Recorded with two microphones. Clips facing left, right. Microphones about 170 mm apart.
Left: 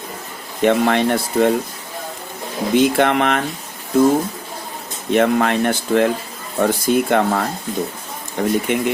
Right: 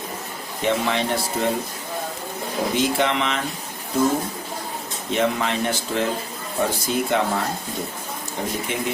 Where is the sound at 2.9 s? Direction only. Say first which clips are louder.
Left 6 dB; 55° left (ahead or behind).